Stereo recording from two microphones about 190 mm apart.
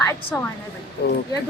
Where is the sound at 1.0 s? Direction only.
60° left (ahead or behind).